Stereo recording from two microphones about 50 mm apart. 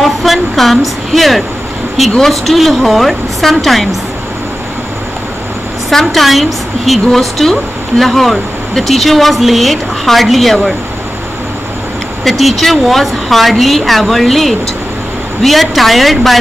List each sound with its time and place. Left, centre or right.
0.0 s speech: centre
5.9 s speech: centre
12.3 s speech: centre